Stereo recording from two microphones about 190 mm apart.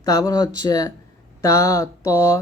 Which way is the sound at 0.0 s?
20° left (ahead or behind).